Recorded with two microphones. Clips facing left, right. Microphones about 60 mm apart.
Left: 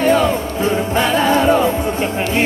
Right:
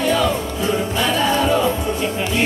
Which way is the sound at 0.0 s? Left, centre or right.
Left.